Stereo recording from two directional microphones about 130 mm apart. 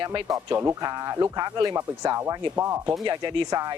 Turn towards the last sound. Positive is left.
turn(degrees=-35)  # may be behind; listen again after turning